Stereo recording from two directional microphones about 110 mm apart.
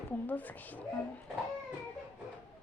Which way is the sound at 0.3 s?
15° left (ahead or behind).